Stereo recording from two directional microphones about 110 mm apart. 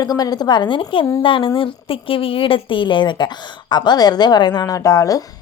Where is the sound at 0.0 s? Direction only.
35° left (ahead or behind).